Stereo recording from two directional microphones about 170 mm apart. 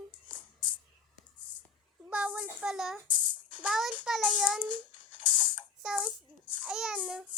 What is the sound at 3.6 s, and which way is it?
Child singing, 5° right (ahead or behind).